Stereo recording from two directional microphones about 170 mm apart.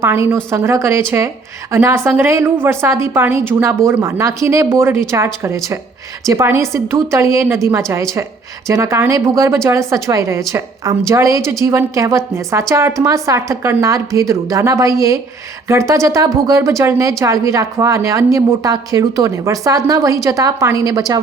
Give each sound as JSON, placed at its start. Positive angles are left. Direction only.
{"t": 0.0, "sound": "a woman's voice", "side_deg": -15}